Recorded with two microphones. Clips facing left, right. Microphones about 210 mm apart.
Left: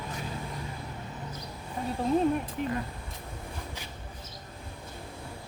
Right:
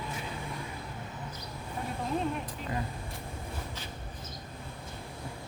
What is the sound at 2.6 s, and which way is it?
Speech, 60° left (ahead or behind).